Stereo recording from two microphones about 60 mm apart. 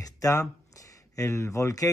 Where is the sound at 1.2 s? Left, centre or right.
Left.